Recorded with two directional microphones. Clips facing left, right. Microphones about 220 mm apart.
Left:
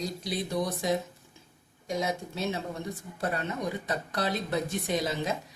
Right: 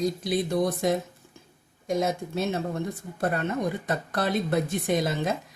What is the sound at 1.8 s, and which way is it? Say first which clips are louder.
Speech: right 5 dB; 50° right (ahead or behind).